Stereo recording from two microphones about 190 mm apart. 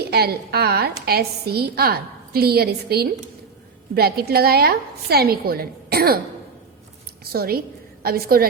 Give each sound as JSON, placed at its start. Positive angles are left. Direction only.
{"t": 0.0, "sound": "a woman's voice", "side_deg": -55}
{"t": 7.3, "sound": "a woman's voice", "side_deg": -55}